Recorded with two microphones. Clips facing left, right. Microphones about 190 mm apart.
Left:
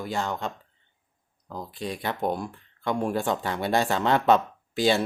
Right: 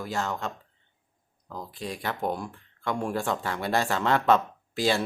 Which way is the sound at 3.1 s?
Centre (ahead or behind).